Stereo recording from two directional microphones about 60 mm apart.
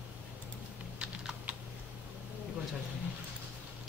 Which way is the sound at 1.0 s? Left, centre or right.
Centre.